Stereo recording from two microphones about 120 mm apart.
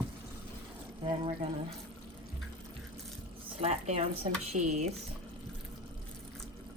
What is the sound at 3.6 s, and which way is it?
Speech, 65° right (ahead or behind).